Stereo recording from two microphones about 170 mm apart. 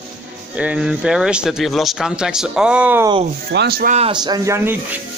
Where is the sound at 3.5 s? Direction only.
75° right (ahead or behind).